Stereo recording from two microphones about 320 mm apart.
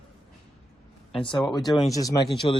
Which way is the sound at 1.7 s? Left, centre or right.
Centre.